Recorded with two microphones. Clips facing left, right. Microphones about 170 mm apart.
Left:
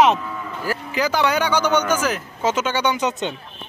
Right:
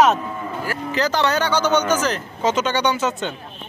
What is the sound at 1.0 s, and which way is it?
A man's voice, 10° left (ahead or behind).